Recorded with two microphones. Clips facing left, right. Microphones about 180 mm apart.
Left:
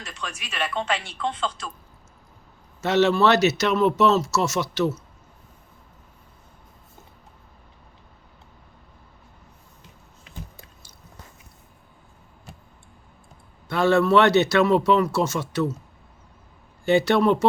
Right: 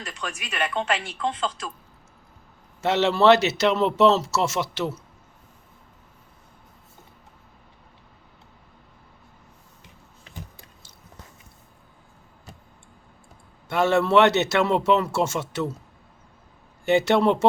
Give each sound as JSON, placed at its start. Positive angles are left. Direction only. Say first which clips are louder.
{"t": 0.7, "sound": "speech", "louder": "right 1 dB", "side_deg": -10}
{"t": 2.8, "sound": "speech", "louder": "right 1 dB", "side_deg": -25}
{"t": 13.7, "sound": "speech", "louder": "left 2 dB", "side_deg": -20}
{"t": 16.8, "sound": "speech", "louder": "even", "side_deg": -20}